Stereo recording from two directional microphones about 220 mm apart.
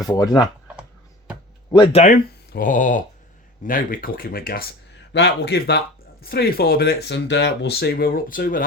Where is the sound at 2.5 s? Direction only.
40° left (ahead or behind).